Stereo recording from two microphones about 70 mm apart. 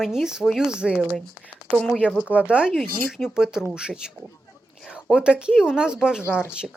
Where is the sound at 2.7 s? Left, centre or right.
Centre.